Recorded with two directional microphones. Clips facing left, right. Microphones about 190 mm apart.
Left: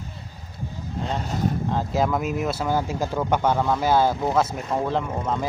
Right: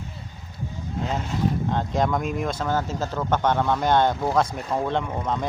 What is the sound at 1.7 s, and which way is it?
Speech, 5° left (ahead or behind).